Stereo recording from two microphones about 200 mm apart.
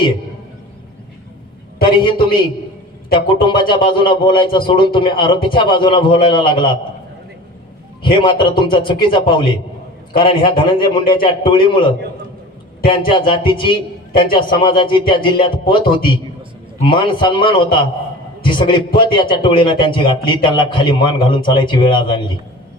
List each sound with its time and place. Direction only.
1.8 s a man's voice: 25° left (ahead or behind)
8.2 s a man's voice: 25° left (ahead or behind)
18.9 s a man's voice: 25° left (ahead or behind)